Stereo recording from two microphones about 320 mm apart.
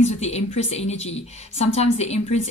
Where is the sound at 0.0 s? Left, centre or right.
Centre.